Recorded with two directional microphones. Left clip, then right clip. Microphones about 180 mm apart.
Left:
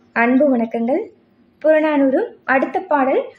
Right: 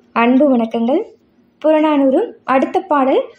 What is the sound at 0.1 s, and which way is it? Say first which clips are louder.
A woman's voice: right 2 dB; 20° right (ahead or behind).